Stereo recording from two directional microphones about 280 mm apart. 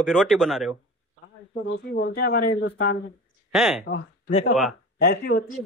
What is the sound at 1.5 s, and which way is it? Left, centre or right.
Speech, left.